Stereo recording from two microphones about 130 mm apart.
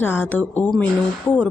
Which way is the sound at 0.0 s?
15° left (ahead or behind).